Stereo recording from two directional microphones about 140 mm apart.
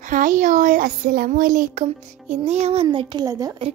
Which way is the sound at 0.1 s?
70° right (ahead or behind).